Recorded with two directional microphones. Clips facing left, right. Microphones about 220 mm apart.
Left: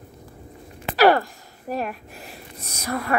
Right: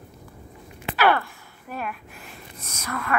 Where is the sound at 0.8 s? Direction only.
40° left (ahead or behind).